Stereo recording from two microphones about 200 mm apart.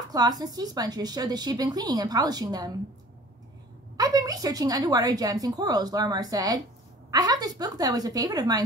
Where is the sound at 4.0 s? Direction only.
15° right (ahead or behind).